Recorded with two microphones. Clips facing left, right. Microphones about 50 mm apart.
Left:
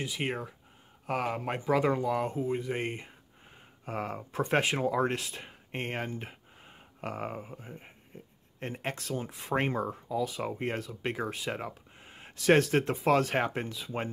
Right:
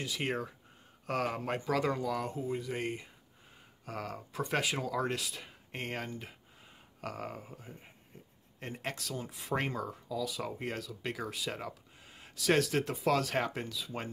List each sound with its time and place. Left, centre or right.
0.0 s speech: centre